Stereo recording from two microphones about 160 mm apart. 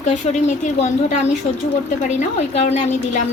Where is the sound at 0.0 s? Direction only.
45° left (ahead or behind).